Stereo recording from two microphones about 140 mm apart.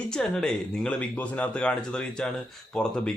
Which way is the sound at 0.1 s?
5° left (ahead or behind).